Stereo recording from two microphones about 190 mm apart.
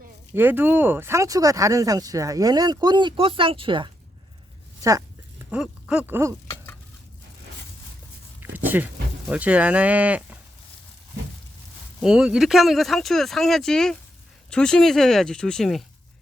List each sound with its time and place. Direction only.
0.3 s speech: 10° right (ahead or behind)
5.5 s speech: 5° right (ahead or behind)
8.4 s a sound: 10° right (ahead or behind)
9.3 s speech: 5° right (ahead or behind)
11.9 s speech: 5° right (ahead or behind)